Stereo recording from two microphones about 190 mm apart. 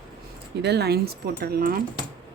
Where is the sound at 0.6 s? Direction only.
60° right (ahead or behind).